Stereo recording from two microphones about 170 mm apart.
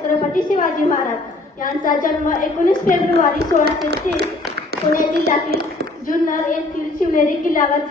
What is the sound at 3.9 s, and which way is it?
Speech, 75° right (ahead or behind).